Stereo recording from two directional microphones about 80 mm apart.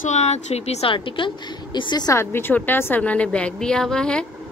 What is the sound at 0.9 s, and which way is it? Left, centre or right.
A woman's voice, left.